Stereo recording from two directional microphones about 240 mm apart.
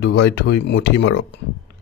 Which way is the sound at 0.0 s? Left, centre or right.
Left.